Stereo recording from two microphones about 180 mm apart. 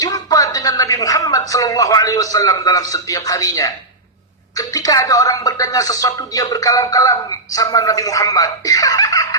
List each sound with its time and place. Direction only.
0.0 s speech: 20° left (ahead or behind)